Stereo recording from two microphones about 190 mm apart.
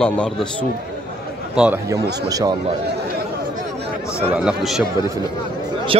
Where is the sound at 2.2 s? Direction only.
20° right (ahead or behind).